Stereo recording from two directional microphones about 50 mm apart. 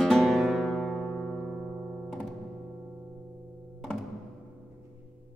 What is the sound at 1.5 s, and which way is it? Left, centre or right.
Music, centre.